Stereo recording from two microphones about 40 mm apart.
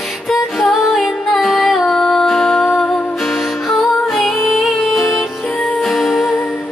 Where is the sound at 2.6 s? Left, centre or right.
Left.